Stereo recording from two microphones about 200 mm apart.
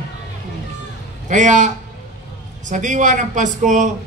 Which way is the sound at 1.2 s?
40° right (ahead or behind).